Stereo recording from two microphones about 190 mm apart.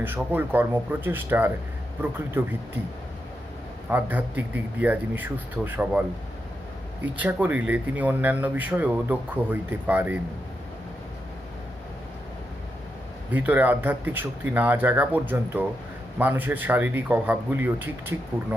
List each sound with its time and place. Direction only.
0.0 s speech: 10° right (ahead or behind)
3.8 s speech: 10° right (ahead or behind)
13.3 s speech: 10° right (ahead or behind)